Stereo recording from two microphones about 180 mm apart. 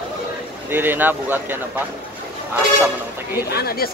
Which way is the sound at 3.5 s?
60° left (ahead or behind).